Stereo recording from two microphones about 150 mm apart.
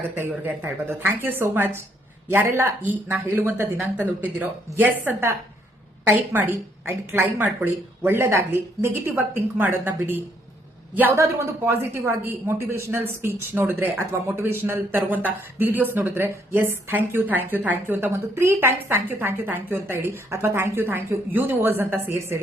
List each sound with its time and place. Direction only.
0.2 s speech: 15° right (ahead or behind)